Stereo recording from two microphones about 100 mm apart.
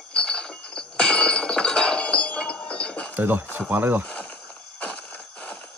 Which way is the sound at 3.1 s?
20° right (ahead or behind).